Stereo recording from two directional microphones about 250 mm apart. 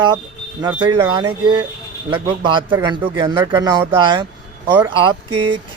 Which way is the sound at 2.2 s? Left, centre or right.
Centre.